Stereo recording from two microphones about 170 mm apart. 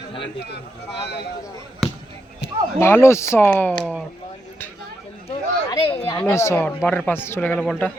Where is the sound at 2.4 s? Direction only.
80° left.